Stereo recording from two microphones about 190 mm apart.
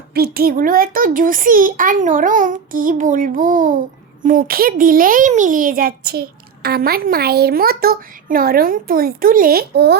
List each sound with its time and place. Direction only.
0.1 s a child's voice: 55° right (ahead or behind)